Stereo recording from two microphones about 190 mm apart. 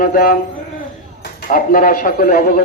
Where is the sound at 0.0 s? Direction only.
45° left (ahead or behind).